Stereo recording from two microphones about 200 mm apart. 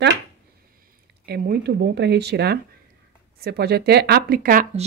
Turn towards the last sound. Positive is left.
turn(degrees=-45)  # may be behind; listen again after turning